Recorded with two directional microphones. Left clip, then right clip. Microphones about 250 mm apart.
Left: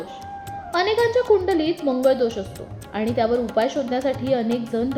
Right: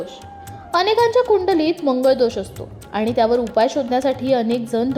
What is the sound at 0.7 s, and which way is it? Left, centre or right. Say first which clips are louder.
A woman's voice: right 4 dB; right.